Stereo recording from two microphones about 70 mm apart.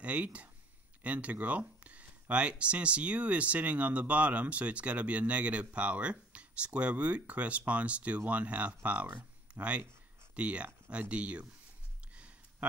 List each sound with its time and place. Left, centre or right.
0.0 s speech: centre